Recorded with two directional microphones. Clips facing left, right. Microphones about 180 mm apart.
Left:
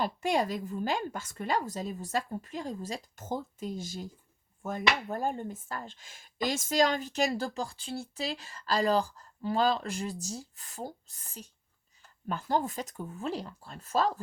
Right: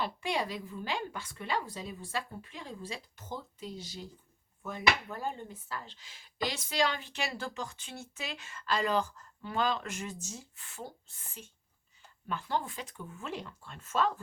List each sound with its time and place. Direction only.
0.0 s a woman's voice: 45° left (ahead or behind)